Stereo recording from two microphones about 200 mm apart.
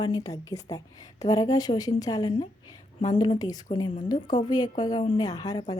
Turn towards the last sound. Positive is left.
turn(degrees=20)  # may be behind; listen again after turning